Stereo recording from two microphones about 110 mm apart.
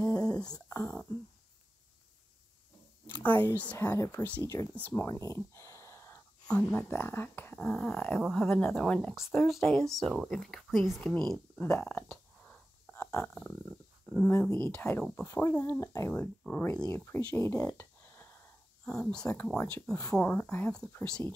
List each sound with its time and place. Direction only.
0.0 s a sound: 35° left (ahead or behind)
0.7 s whispering: 20° left (ahead or behind)
3.2 s speech: 15° left (ahead or behind)
4.9 s a sound: 30° left (ahead or behind)
6.4 s speech: 10° left (ahead or behind)
8.2 s speech: centre (ahead or behind)
11.8 s a sound: 10° left (ahead or behind)
13.1 s speech: 10° left (ahead or behind)
15.2 s speech: 30° left (ahead or behind)
16.4 s speech: 15° left (ahead or behind)
17.7 s a sound: 20° left (ahead or behind)
19.0 s speech: 15° left (ahead or behind)
20.0 s speech: 30° left (ahead or behind)
20.2 s speech: 15° left (ahead or behind)